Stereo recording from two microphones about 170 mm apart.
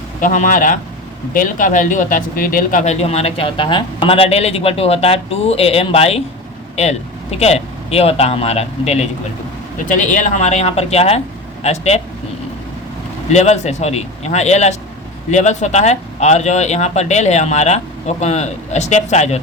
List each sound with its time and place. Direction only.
0.2 s speech: 50° left (ahead or behind)
9.7 s speech: 50° left (ahead or behind)
13.3 s speech: 40° left (ahead or behind)